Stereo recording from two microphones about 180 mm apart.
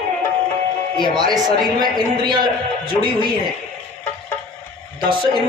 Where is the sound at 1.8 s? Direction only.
25° right (ahead or behind).